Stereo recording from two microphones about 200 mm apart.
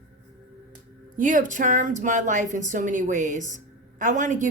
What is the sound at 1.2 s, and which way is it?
Speech, 40° right (ahead or behind).